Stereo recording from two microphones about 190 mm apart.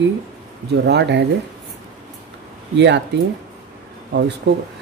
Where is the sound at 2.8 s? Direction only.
70° right (ahead or behind).